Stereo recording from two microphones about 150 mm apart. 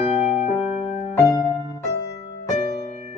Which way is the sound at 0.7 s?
45° left (ahead or behind).